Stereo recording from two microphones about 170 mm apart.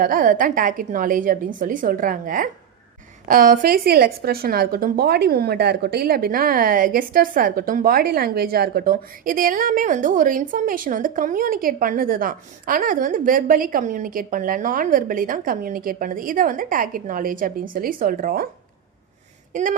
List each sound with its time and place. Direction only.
0.0 s a woman's voice: 50° right (ahead or behind)
19.5 s a woman's voice: 50° right (ahead or behind)